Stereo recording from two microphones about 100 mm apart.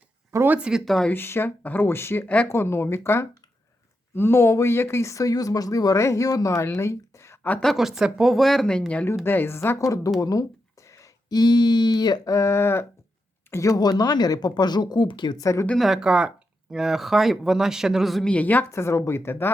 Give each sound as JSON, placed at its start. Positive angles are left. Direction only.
{"t": 0.3, "sound": "a sound", "side_deg": -25}
{"t": 0.5, "sound": "speech", "side_deg": -10}
{"t": 0.9, "sound": "speech", "side_deg": 0}
{"t": 1.1, "sound": "speech", "side_deg": 20}
{"t": 7.6, "sound": "speech", "side_deg": 0}
{"t": 9.2, "sound": "speech", "side_deg": 20}
{"t": 10.8, "sound": "a sound", "side_deg": 30}
{"t": 13.5, "sound": "speech", "side_deg": 35}
{"t": 15.8, "sound": "speech", "side_deg": -5}
{"t": 18.3, "sound": "speech", "side_deg": 15}